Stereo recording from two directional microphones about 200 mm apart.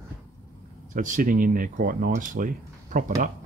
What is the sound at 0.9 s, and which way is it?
Speech, 40° right (ahead or behind).